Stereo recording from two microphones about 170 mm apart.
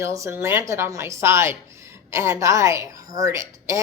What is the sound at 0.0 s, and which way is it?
A woman's voice, 20° right (ahead or behind).